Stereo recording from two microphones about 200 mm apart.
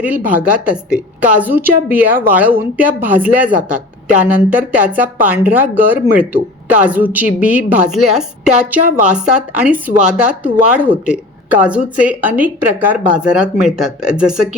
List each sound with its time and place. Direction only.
0.0 s a woman's voice: 10° right (ahead or behind)